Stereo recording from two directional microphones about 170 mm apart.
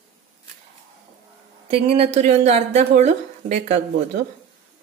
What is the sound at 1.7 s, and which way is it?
A woman's voice, 35° right (ahead or behind).